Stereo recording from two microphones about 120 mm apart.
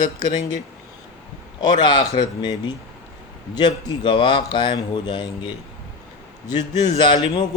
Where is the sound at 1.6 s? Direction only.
35° left (ahead or behind).